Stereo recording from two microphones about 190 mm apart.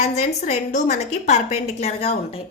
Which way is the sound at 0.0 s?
35° left (ahead or behind).